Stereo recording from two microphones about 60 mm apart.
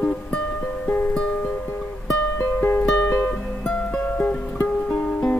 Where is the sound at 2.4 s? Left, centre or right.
Left.